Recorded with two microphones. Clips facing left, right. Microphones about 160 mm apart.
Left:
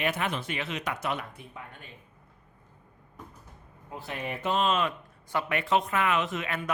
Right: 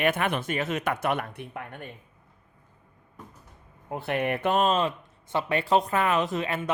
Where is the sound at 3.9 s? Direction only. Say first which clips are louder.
Right 8 dB; 60° right (ahead or behind).